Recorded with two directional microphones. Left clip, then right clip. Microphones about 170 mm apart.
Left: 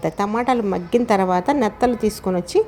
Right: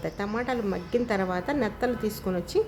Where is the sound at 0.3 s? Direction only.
30° left (ahead or behind).